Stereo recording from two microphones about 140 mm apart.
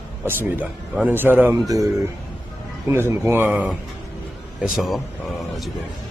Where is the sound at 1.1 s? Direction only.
15° right (ahead or behind).